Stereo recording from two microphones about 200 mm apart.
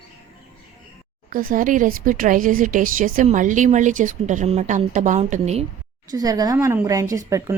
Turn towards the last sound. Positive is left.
turn(degrees=-15)  # may be behind; listen again after turning